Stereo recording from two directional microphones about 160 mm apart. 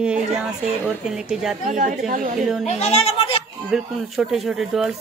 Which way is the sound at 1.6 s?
50° right (ahead or behind).